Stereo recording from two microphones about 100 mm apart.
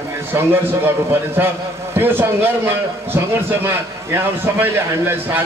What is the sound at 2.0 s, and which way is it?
A man's voice, 20° right (ahead or behind).